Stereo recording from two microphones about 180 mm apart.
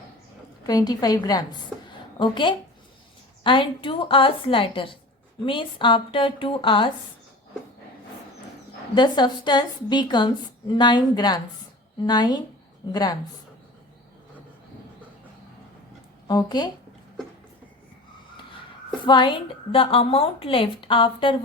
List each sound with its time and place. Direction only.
0.6 s a woman's voice: 20° left (ahead or behind)
9.0 s a woman's voice: 25° left (ahead or behind)
16.2 s a woman's voice: 20° left (ahead or behind)
18.9 s a woman's voice: 25° left (ahead or behind)